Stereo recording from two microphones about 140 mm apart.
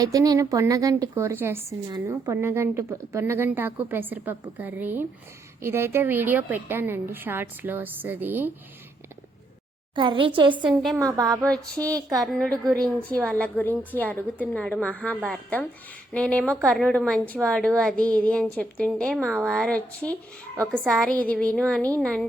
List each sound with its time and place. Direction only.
0.0 s a woman's voice: 25° right (ahead or behind)
9.9 s a woman's voice: 35° right (ahead or behind)
11.0 s a woman's voice: 25° right (ahead or behind)
12.2 s a woman's voice: 5° left (ahead or behind)